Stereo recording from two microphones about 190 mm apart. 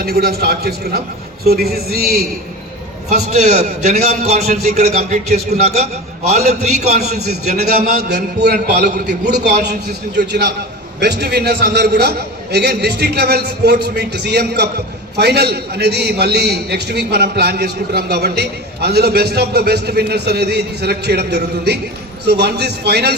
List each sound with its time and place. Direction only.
0.0 s a man's voice: 55° right (ahead or behind)
3.3 s a man's voice: 35° right (ahead or behind)
7.8 s a man's voice: 60° right (ahead or behind)